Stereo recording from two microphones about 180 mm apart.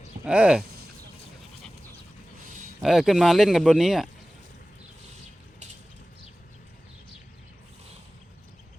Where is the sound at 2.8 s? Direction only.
Centre (ahead or behind).